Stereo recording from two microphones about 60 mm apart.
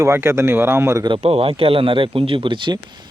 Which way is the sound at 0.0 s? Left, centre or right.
Right.